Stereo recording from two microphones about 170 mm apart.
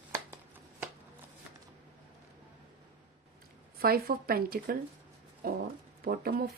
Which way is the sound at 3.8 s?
65° right (ahead or behind).